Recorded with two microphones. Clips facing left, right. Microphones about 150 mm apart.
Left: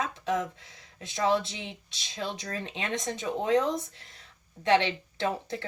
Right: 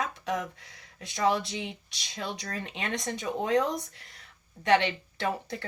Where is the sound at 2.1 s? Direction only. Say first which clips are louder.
Left 1 dB; 20° left (ahead or behind).